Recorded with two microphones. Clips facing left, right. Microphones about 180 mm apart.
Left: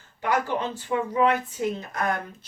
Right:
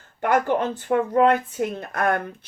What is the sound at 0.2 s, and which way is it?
A woman's voice, 55° right (ahead or behind).